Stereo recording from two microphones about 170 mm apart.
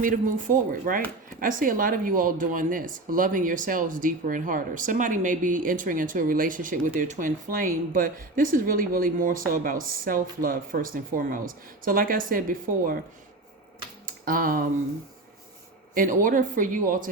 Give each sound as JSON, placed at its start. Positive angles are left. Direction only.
{"t": 0.0, "sound": "speech", "side_deg": -55}
{"t": 14.3, "sound": "speech", "side_deg": -55}
{"t": 16.0, "sound": "speech", "side_deg": -50}